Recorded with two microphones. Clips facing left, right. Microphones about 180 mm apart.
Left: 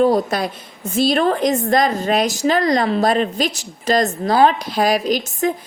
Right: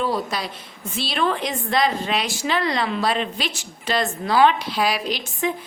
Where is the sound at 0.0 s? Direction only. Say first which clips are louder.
Left 8 dB; 45° left (ahead or behind).